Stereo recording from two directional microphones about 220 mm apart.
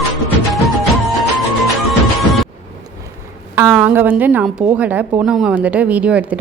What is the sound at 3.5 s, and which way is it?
A woman's voice, 10° right (ahead or behind).